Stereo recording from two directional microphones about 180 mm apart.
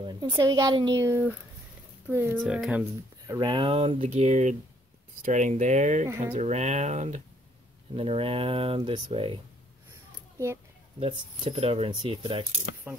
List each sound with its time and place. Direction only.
0.0 s speech: 25° right (ahead or behind)
2.3 s speech: centre (ahead or behind)
3.3 s speech: 25° right (ahead or behind); by 6.0 s 40° right (ahead or behind)
6.0 s speech: 15° right (ahead or behind)
6.3 s speech: 40° right (ahead or behind)
11.0 s speech: 30° right (ahead or behind)
12.9 s speech: 5° right (ahead or behind)